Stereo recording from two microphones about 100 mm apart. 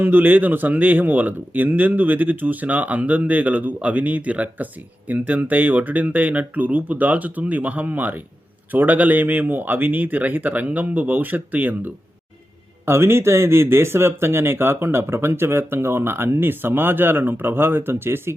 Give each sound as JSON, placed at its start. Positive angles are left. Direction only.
{"t": 0.0, "sound": "speech", "side_deg": -20}